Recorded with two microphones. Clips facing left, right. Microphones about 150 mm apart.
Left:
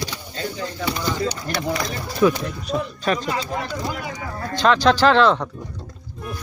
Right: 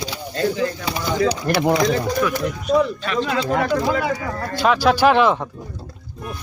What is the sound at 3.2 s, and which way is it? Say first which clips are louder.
Speech: right 6 dB; 90° right.